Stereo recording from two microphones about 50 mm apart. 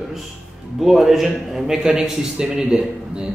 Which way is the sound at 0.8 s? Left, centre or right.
Centre.